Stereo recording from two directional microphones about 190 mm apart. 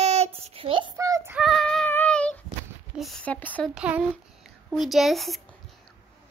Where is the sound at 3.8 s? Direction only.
5° right (ahead or behind).